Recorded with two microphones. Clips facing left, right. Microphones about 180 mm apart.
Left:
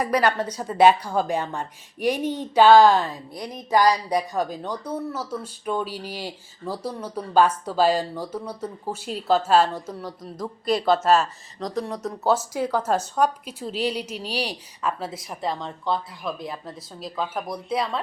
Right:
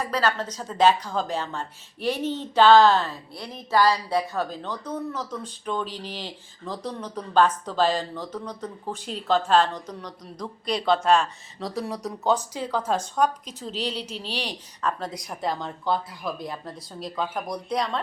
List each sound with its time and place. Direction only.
0.0 s a woman's voice: 15° left (ahead or behind); by 12.1 s 5° right (ahead or behind)
12.5 s a woman's voice: 10° left (ahead or behind)